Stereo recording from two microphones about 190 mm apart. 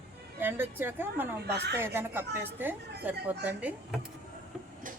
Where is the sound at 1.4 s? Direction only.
60° right (ahead or behind).